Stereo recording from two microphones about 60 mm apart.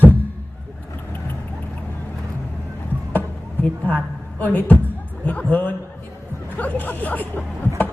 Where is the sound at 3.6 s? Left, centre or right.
Left.